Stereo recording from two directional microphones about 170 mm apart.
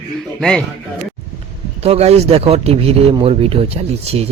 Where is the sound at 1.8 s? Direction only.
35° right (ahead or behind).